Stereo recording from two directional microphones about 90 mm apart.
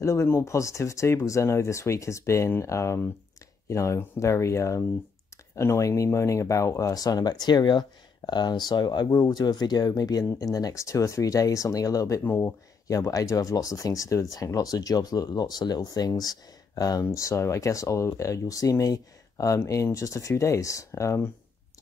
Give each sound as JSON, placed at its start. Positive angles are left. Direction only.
{"t": 0.0, "sound": "speech", "side_deg": 30}
{"t": 12.2, "sound": "speech", "side_deg": 25}
{"t": 12.8, "sound": "speech", "side_deg": 40}